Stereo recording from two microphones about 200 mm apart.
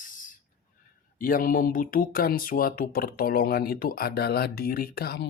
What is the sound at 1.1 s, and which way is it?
Speech, 45° left (ahead or behind).